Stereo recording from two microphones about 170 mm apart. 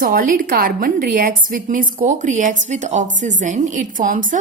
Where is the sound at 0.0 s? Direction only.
55° right (ahead or behind).